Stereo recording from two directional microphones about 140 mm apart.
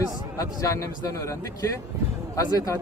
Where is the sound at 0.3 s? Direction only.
20° left (ahead or behind).